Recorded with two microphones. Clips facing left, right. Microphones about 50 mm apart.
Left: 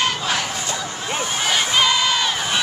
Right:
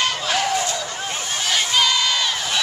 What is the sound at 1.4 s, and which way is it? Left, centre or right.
Crowd, centre.